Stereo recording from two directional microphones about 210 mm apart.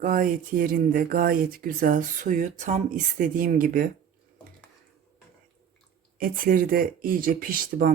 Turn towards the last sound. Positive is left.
turn(degrees=-40)  # may be behind; listen again after turning